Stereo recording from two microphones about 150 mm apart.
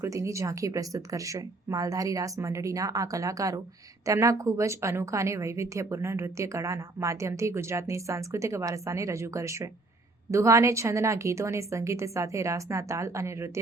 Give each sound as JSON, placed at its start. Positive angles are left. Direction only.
{"t": 0.0, "sound": "a woman's voice", "side_deg": -20}